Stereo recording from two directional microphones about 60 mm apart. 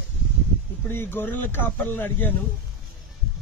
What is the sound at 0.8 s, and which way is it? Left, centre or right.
Speech, left.